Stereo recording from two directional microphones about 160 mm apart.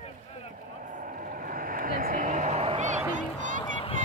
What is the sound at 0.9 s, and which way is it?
Vehicle, 60° right (ahead or behind).